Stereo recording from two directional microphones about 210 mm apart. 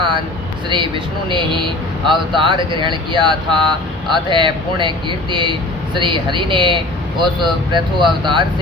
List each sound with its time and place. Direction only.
0.7 s speech: 25° right (ahead or behind)